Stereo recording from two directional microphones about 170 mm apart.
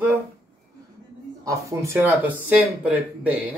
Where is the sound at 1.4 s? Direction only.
20° right (ahead or behind).